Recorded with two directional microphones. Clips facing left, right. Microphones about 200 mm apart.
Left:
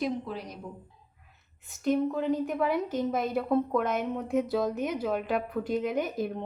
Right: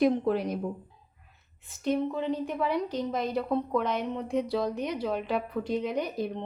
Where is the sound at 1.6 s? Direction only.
Centre (ahead or behind).